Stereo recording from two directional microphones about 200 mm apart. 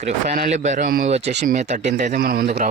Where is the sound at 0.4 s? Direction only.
35° right (ahead or behind).